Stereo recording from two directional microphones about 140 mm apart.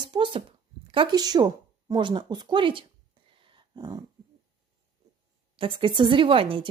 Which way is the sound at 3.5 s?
25° right (ahead or behind).